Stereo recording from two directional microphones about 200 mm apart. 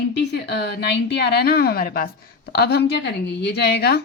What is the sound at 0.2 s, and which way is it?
Speech, 55° left (ahead or behind).